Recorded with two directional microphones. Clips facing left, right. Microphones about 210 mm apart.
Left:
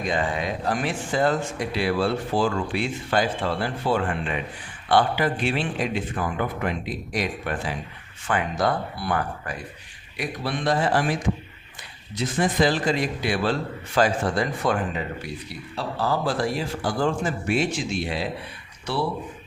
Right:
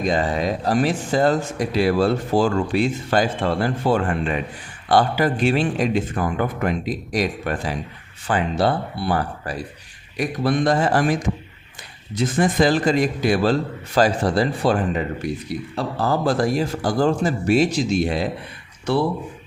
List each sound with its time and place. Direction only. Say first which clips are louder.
0.0 s speech: right 5 dB; 40° right (ahead or behind)
10.2 s speech: right 8 dB; 45° right (ahead or behind)
15.2 s speech: right 9 dB; 45° right (ahead or behind)